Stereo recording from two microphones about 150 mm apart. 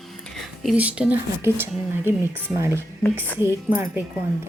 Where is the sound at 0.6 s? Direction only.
5° right (ahead or behind).